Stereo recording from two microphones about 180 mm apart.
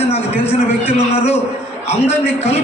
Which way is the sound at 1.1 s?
35° left (ahead or behind).